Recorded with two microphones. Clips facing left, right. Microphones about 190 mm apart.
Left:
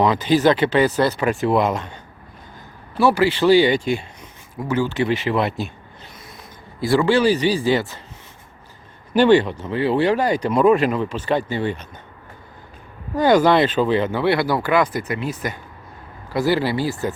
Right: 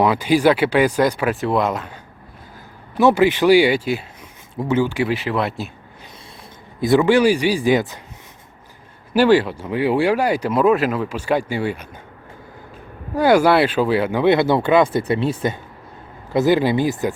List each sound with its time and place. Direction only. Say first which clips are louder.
0.0 s speech: right 1 dB; 10° right (ahead or behind)
1.3 s speech: left 1 dB; centre (ahead or behind)
3.0 s speech: right 2 dB; 20° right (ahead or behind)
4.5 s speech: right 2 dB; 20° right (ahead or behind); by 5.7 s centre (ahead or behind)
6.7 s speech: right 3 dB; 20° right (ahead or behind)
9.1 s speech: even; 5° right (ahead or behind)
13.1 s speech: right 1 dB; 10° right (ahead or behind)